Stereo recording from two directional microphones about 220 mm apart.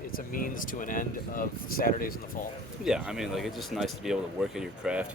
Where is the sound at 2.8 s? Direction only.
5° right (ahead or behind).